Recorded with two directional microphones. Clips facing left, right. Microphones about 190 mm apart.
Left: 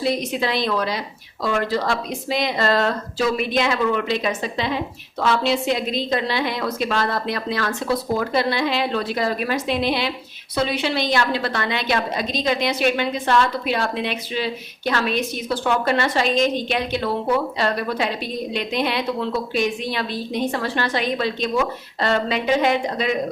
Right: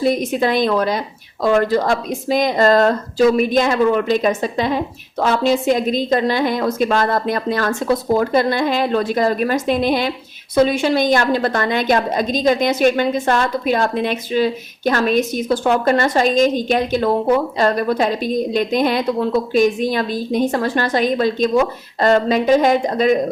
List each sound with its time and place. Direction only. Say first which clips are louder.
0.0 s a woman's voice: right 5 dB; 50° right (ahead or behind)